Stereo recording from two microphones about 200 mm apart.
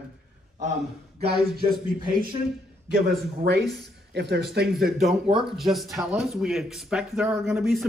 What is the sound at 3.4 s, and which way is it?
Speech, 55° right (ahead or behind).